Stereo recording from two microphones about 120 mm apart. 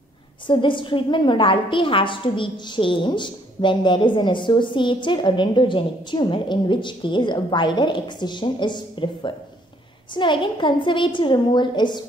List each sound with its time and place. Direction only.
0.5 s a woman's voice: 45° left (ahead or behind)